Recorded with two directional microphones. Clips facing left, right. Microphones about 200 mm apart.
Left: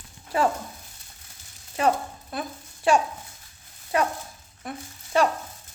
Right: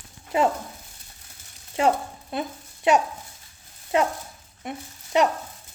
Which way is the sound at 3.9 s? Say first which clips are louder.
Right 2 dB; 25° right (ahead or behind).